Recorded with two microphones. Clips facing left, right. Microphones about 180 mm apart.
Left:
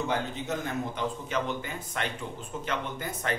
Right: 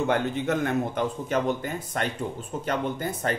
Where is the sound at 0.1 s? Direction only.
60° right (ahead or behind).